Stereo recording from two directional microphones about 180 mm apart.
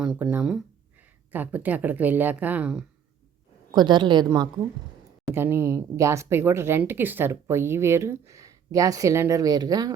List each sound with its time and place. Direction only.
0.0 s speech: 5° right (ahead or behind)
3.7 s a woman's voice: 25° right (ahead or behind)